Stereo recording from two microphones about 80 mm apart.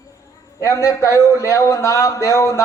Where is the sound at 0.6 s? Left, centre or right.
Left.